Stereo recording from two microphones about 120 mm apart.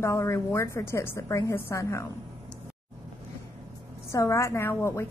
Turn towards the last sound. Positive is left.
turn(degrees=20)  # may be behind; listen again after turning